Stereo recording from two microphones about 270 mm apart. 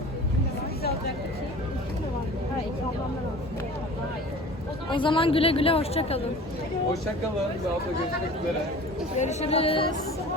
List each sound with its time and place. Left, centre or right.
4.9 s a woman's voice: centre
9.1 s a woman's voice: left